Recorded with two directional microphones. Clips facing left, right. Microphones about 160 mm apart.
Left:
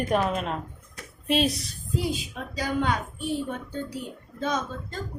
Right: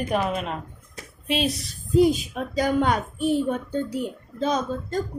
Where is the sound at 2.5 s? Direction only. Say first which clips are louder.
Right 5 dB; 45° right (ahead or behind).